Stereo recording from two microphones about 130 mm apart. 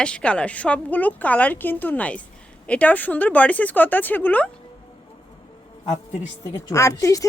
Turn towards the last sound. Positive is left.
turn(degrees=25)  # may be behind; listen again after turning